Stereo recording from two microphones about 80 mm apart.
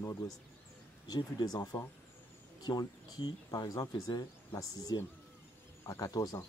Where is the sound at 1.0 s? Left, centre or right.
Left.